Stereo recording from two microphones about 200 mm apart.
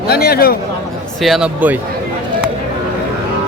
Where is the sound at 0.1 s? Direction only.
50° left (ahead or behind).